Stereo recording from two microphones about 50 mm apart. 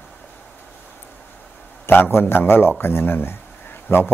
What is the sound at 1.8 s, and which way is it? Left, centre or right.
A man's voice, left.